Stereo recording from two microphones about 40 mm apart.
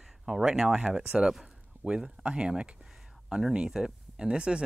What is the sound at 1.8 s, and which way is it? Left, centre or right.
Speech, right.